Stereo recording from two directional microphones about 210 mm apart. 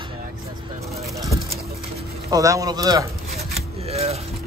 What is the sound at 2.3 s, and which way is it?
Speech, 15° right (ahead or behind).